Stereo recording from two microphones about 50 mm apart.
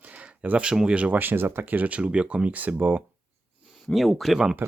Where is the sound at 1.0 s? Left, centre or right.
Right.